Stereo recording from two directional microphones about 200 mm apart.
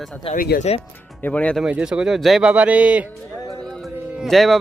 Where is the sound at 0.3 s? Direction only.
50° left (ahead or behind).